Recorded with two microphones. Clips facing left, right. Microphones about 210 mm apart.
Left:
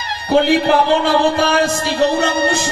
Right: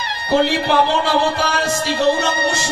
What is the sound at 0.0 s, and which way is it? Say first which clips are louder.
Speech: left 2 dB; 55° left (ahead or behind).